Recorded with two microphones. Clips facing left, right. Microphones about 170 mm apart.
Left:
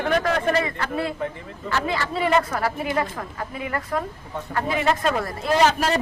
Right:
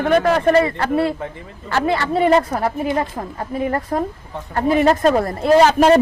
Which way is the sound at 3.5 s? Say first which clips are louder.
Right 7 dB; 40° right (ahead or behind).